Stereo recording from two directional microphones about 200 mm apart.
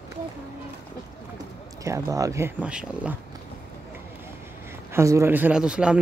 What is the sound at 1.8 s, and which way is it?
Speech, 15° right (ahead or behind).